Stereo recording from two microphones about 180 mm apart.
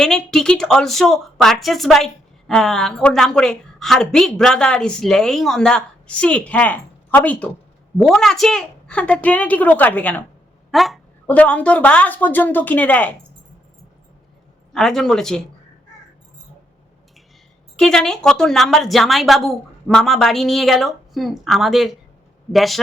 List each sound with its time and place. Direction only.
0.0 s a woman's voice: 5° left (ahead or behind)
14.7 s a woman's voice: centre (ahead or behind)
17.7 s a woman's voice: 5° left (ahead or behind)